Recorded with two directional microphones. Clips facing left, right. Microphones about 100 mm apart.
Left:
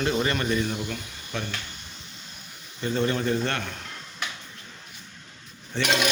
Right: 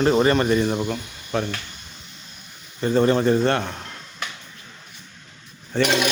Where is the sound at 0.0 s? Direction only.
45° right (ahead or behind).